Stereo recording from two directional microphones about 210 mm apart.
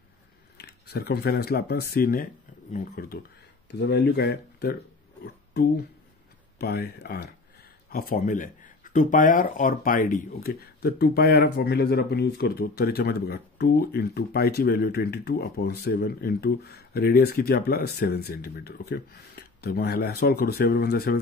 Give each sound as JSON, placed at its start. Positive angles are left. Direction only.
{"t": 0.6, "sound": "speech", "side_deg": 50}
{"t": 5.2, "sound": "a sound", "side_deg": 50}
{"t": 6.6, "sound": "speech", "side_deg": 50}